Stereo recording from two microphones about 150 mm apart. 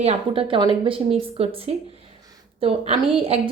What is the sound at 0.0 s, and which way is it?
Speech, 40° right (ahead or behind).